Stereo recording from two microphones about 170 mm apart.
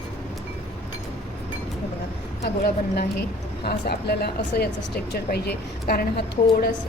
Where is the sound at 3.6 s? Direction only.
70° left (ahead or behind).